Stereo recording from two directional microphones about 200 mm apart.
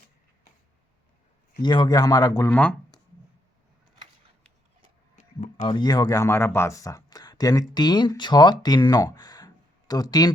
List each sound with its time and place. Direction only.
1.6 s a man's voice: 20° left (ahead or behind)
2.5 s speech: 5° left (ahead or behind)
5.1 s a sound: 35° left (ahead or behind)
5.6 s speech: 20° left (ahead or behind)